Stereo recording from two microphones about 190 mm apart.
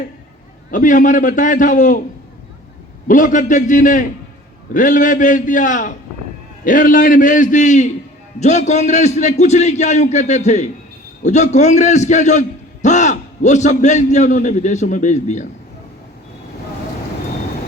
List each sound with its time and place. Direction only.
0.7 s a man's voice: 45° left (ahead or behind)
3.1 s a man's voice: 45° left (ahead or behind)